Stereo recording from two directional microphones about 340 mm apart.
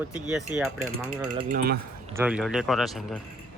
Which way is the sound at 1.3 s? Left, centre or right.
Centre.